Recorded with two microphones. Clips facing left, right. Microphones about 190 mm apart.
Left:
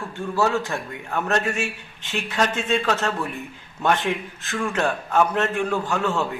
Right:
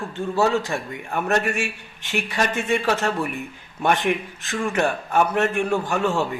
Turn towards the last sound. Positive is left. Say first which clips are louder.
# right 2 dB
turn(degrees=-15)  # may be behind; listen again after turning